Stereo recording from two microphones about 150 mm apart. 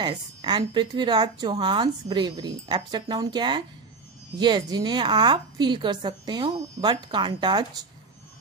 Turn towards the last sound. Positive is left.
turn(degrees=-25)  # may be behind; listen again after turning